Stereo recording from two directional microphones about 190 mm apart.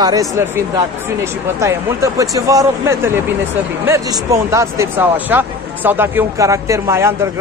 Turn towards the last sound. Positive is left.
turn(degrees=-15)  # may be behind; listen again after turning